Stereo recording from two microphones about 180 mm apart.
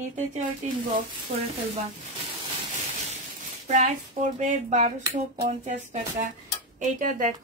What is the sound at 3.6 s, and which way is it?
Speech, 40° right (ahead or behind).